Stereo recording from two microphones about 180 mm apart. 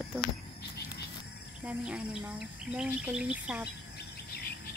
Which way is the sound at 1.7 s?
5° right (ahead or behind).